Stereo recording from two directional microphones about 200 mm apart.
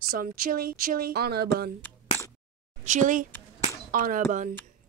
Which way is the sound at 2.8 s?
40° right (ahead or behind).